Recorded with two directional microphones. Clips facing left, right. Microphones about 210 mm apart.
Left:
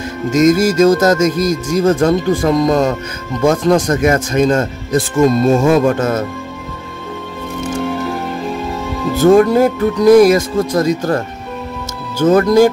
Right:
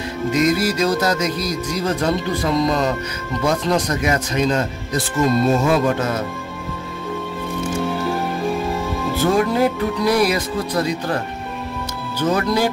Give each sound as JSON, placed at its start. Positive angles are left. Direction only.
{"t": 0.3, "sound": "speech", "side_deg": 45}
{"t": 9.2, "sound": "speech", "side_deg": 45}
{"t": 12.2, "sound": "speech", "side_deg": 45}